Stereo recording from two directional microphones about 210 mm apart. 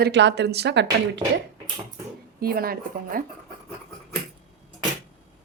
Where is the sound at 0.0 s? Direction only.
55° right (ahead or behind).